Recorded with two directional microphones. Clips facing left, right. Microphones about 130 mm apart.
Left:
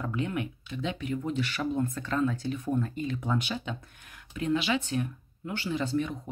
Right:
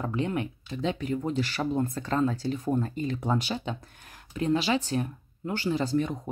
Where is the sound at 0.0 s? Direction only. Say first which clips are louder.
Right 2 dB; 30° right (ahead or behind).